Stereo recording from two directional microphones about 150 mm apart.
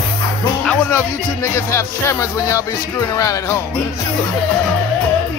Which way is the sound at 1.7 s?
20° left (ahead or behind).